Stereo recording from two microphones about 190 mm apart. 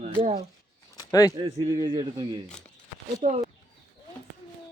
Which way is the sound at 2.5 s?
5° left (ahead or behind).